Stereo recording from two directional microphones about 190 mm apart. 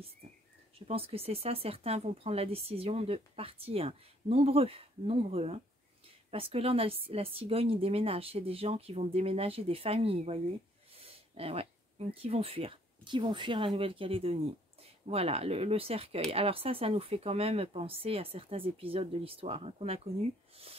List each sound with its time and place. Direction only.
0.2 s bird: 35° right (ahead or behind)
0.7 s speech: 30° right (ahead or behind)